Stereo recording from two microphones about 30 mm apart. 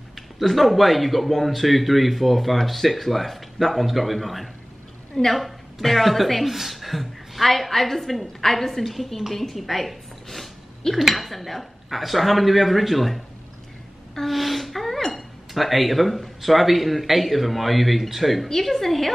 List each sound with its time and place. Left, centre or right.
0.1 s a man's voice: centre
10.8 s a woman's voice: centre
11.1 s a man's voice: centre
14.2 s a sound: centre
15.0 s a man's voice: centre